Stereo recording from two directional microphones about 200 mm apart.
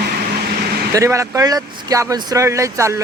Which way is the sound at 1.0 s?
15° right (ahead or behind).